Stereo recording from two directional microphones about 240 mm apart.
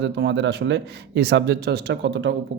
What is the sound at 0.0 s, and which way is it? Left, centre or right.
Speech, right.